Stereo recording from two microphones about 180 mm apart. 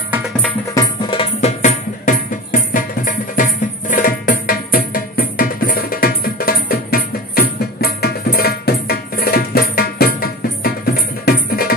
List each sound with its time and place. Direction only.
1.4 s music: 45° left (ahead or behind)